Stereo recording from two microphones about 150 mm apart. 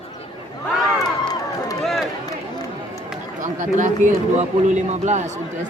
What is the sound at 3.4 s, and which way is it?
A man's voice, 55° right (ahead or behind).